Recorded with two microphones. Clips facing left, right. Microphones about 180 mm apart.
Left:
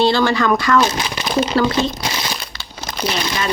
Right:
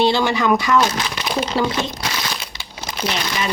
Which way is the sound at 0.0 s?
15° right (ahead or behind).